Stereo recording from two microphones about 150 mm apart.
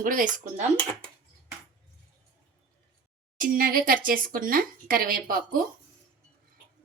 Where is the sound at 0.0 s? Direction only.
60° right (ahead or behind).